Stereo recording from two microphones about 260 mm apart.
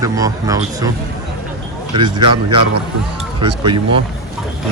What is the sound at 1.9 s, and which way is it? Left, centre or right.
Speech, centre.